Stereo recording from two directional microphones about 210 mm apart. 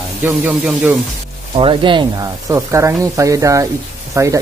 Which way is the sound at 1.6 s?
25° right (ahead or behind).